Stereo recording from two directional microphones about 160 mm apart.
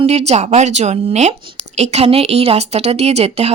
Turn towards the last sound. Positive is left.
turn(degrees=-40)  # may be behind; listen again after turning